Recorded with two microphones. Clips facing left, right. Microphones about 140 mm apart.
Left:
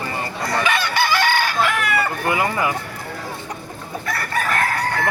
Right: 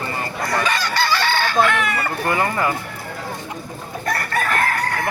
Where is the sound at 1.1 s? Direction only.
15° left (ahead or behind).